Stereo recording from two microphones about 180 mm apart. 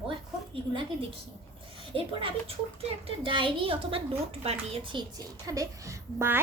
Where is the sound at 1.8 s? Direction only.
30° right (ahead or behind); by 6.4 s 15° right (ahead or behind).